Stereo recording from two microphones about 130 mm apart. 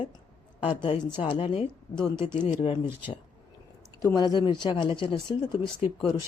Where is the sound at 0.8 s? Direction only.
45° left (ahead or behind).